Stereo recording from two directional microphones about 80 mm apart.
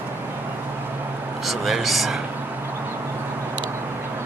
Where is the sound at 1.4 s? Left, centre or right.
Centre.